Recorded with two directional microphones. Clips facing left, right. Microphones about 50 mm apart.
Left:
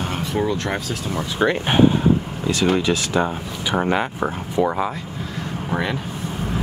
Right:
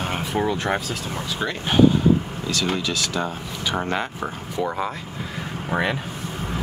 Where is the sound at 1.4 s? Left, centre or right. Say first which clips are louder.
Left 2 dB; left; by 4.9 s centre.